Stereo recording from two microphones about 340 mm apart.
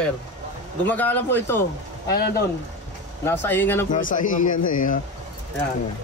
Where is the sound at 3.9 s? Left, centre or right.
Left.